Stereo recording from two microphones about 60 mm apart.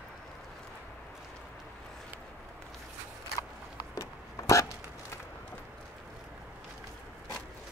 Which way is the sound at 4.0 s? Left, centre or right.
Left.